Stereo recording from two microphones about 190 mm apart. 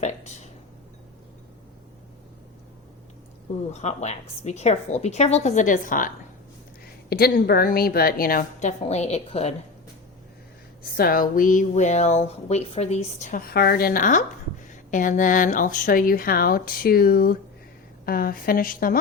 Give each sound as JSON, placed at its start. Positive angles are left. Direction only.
{"t": 0.0, "sound": "a sound", "side_deg": 35}
{"t": 3.7, "sound": "a woman's voice", "side_deg": 35}
{"t": 10.9, "sound": "a woman's voice", "side_deg": 50}
{"t": 13.5, "sound": "speech", "side_deg": 55}